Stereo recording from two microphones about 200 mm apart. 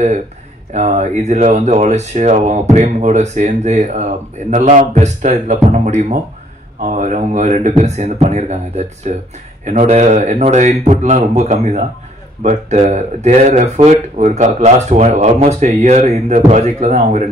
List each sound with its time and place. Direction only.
0.7 s speech: 35° right (ahead or behind)